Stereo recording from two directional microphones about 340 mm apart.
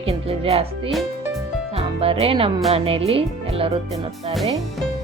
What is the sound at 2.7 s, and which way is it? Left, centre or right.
Speech, centre.